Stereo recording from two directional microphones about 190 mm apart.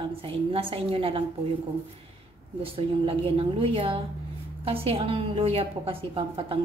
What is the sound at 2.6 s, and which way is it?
A woman's voice, 30° right (ahead or behind).